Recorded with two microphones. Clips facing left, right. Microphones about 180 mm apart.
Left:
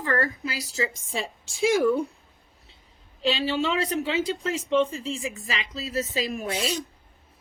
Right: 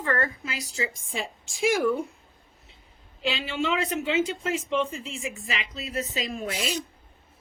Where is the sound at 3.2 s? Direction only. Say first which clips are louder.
Left 3 dB; 35° left (ahead or behind).